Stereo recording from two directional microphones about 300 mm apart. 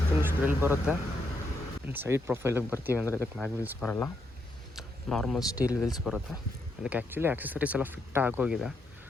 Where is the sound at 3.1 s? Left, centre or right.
Centre.